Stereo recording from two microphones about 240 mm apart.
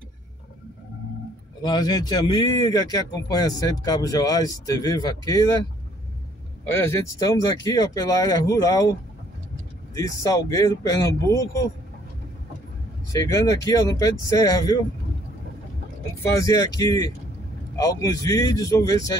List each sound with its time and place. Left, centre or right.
1.6 s speech: centre
6.7 s speech: centre
9.9 s speech: centre
13.1 s speech: centre
16.3 s speech: centre